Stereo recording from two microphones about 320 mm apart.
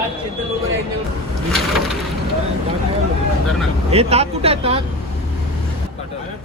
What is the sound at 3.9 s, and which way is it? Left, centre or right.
Speech, centre.